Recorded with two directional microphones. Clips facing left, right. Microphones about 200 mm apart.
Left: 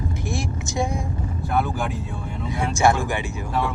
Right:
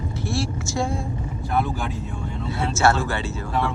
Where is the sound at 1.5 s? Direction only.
Centre (ahead or behind).